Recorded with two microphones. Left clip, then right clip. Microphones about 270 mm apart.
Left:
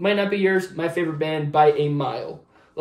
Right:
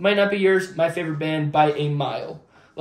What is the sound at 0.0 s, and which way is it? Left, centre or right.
Speech, centre.